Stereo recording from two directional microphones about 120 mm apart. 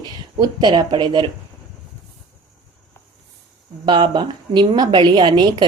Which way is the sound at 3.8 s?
45° right (ahead or behind).